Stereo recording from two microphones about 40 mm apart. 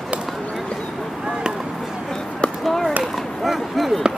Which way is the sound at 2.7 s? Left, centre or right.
Centre.